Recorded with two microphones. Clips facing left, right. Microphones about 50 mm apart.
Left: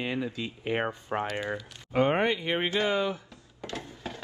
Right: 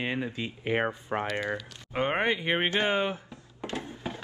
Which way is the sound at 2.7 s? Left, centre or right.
Right.